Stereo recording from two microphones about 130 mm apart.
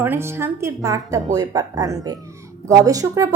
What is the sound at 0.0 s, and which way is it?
Speech, 15° right (ahead or behind).